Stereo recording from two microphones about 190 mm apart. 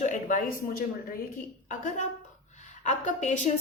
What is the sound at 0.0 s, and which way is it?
Speech, 45° left (ahead or behind).